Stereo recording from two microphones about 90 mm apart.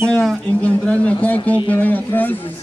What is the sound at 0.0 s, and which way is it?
A man's voice, 5° left (ahead or behind).